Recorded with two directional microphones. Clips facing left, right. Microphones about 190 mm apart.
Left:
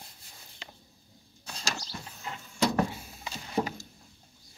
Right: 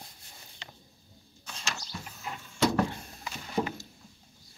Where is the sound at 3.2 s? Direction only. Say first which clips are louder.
Even; 35° left (ahead or behind).